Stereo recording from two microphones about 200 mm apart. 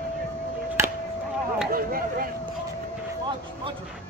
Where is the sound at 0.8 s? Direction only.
15° right (ahead or behind).